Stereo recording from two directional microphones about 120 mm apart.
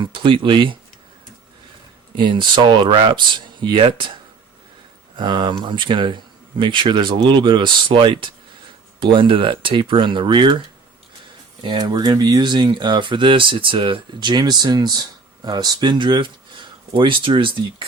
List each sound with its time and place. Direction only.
0.0 s speech: 45° right (ahead or behind)
2.1 s speech: 40° right (ahead or behind)
5.1 s speech: 40° right (ahead or behind)
11.6 s speech: 35° right (ahead or behind)